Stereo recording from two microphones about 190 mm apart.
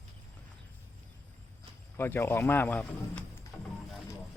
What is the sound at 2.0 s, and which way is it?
Speech, 10° left (ahead or behind).